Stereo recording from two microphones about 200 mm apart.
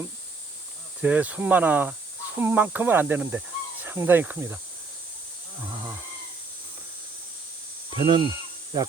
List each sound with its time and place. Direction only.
1.0 s speech: 10° right (ahead or behind)
7.9 s speech: 25° right (ahead or behind)
8.7 s insect: 20° right (ahead or behind)